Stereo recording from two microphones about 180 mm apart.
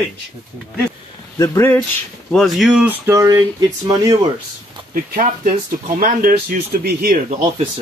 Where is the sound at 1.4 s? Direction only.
10° left (ahead or behind).